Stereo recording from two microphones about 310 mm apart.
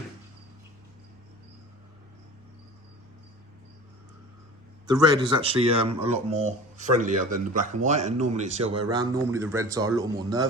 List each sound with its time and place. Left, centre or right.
4.9 s speech: centre